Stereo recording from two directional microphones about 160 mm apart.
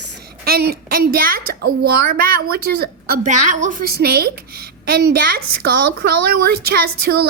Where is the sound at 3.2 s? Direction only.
50° right (ahead or behind).